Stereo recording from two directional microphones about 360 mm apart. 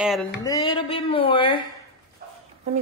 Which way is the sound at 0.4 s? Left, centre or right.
Centre.